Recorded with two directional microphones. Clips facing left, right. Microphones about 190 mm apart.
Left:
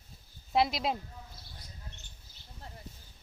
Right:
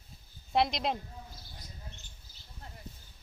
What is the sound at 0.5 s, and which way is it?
Speech, centre (ahead or behind).